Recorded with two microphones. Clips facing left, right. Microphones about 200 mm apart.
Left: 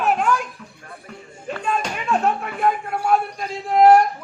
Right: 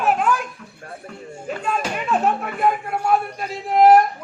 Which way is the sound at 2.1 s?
Centre (ahead or behind).